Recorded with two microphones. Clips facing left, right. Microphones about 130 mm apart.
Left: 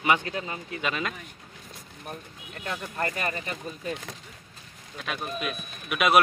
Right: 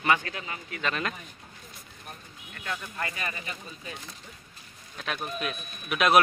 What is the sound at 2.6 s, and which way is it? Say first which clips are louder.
Speech: left 4 dB; 40° left (ahead or behind).